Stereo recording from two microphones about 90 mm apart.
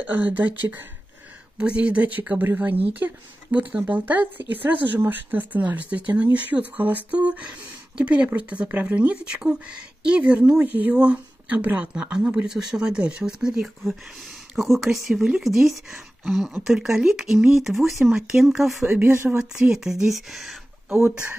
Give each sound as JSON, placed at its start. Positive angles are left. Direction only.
{"t": 0.0, "sound": "speech", "side_deg": -20}
{"t": 1.6, "sound": "speech", "side_deg": -15}
{"t": 18.9, "sound": "speech", "side_deg": -20}
{"t": 19.5, "sound": "speech", "side_deg": -10}
{"t": 21.1, "sound": "speech", "side_deg": -10}